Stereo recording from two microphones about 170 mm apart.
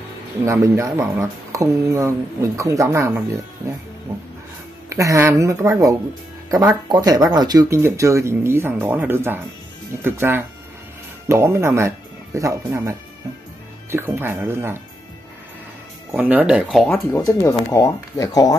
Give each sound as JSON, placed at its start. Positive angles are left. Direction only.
{"t": 0.5, "sound": "speech", "side_deg": -15}
{"t": 4.8, "sound": "speech", "side_deg": -15}
{"t": 16.1, "sound": "speech", "side_deg": -10}
{"t": 16.8, "sound": "speech", "side_deg": 15}